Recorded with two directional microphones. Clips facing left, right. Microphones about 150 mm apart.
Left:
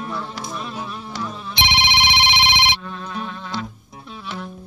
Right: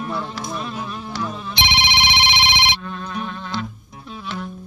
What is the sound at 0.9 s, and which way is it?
Insect, centre (ahead or behind).